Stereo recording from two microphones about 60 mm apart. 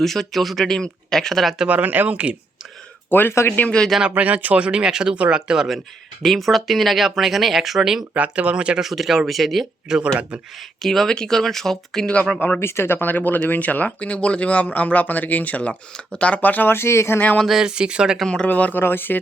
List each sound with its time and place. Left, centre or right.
0.0 s speech: centre
1.6 s speech: right
3.1 s speech: left
4.1 s speech: right
6.2 s speech: centre
8.1 s speech: right
8.8 s speech: centre
9.9 s speech: right
10.8 s speech: centre
12.5 s speech: left
17.4 s speech: centre
17.7 s speech: centre
18.4 s speech: left
18.8 s speech: left